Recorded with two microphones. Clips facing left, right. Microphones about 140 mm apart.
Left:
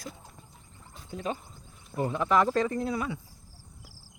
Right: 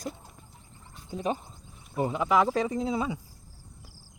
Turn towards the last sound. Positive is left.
turn(degrees=-20)  # may be behind; listen again after turning